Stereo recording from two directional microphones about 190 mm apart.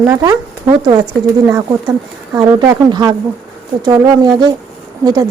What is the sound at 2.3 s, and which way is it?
Speech, 20° right (ahead or behind).